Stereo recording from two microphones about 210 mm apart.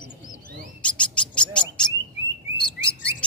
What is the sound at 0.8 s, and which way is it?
Bird, 5° left (ahead or behind).